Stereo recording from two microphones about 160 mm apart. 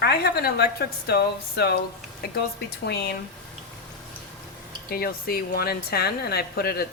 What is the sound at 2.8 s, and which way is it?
Speech, 90° left.